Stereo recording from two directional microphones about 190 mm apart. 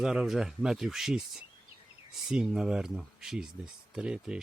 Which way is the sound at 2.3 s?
5° right (ahead or behind).